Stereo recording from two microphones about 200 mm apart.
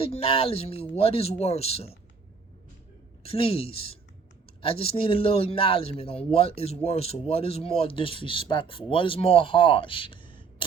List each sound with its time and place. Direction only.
0.0 s a man's voice: 30° left (ahead or behind)
3.2 s a man's voice: 30° left (ahead or behind)